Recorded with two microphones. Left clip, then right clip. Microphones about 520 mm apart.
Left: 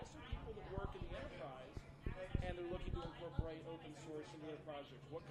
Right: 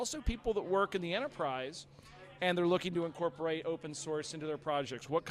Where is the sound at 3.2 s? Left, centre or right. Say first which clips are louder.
Right 15 dB; right.